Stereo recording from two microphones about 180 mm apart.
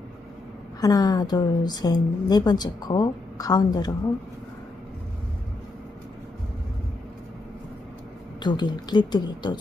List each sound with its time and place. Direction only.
0.7 s a woman's voice: 20° left (ahead or behind)
8.4 s a woman's voice: 25° left (ahead or behind)